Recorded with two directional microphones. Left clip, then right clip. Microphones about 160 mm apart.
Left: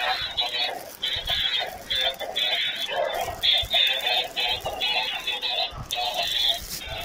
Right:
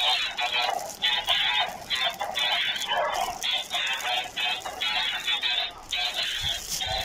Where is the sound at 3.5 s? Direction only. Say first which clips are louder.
Left 6 dB; 20° left (ahead or behind).